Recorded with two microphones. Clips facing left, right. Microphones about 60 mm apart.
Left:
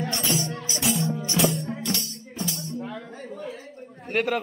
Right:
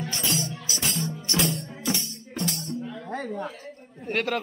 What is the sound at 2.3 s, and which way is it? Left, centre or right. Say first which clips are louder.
Music: right 2 dB; right.